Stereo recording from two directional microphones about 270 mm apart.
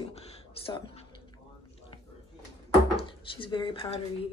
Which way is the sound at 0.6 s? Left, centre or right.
Left.